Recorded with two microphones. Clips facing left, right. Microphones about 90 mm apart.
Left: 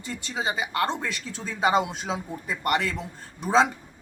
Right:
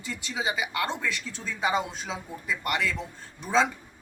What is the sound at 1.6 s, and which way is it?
Speech, 65° left (ahead or behind).